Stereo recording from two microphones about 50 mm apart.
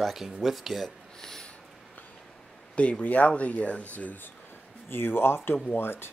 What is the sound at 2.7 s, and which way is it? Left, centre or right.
Speech, left.